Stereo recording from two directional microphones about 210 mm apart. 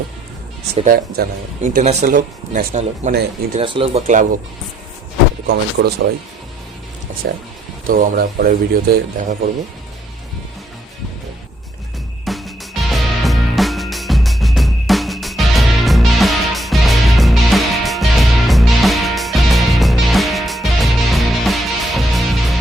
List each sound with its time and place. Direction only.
0.9 s speech: 45° right (ahead or behind)
3.6 s speech: 25° right (ahead or behind)
5.8 s speech: 55° right (ahead or behind)
7.9 s speech: 45° right (ahead or behind)
12.2 s music: centre (ahead or behind)